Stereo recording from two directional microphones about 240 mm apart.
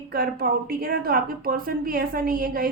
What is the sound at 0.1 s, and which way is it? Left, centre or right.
A woman's voice, right.